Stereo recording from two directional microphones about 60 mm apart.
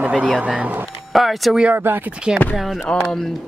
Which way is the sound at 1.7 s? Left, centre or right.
Right.